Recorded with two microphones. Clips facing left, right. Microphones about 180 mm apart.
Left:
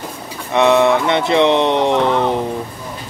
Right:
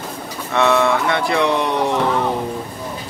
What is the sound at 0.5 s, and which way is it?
Speech, 20° left (ahead or behind).